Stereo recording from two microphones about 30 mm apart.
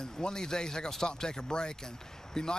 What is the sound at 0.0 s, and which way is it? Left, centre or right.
Speech, left.